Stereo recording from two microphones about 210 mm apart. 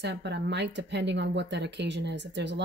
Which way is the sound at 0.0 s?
55° right (ahead or behind).